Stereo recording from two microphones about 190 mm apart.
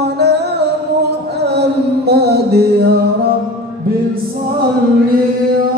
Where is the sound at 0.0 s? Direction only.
60° right (ahead or behind).